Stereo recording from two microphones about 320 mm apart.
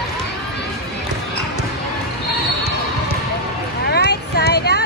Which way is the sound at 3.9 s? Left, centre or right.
Left.